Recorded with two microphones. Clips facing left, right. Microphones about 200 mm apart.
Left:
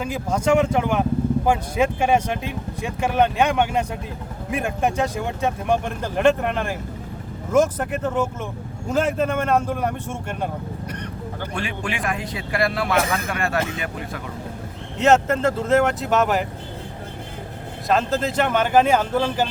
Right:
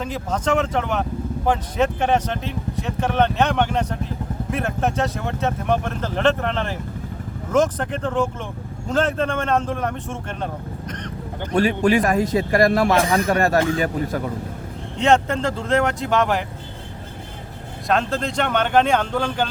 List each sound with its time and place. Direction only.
0.0 s speech: 10° left (ahead or behind)
11.5 s speech: 40° right (ahead or behind)
14.9 s speech: 5° left (ahead or behind)
17.8 s speech: centre (ahead or behind)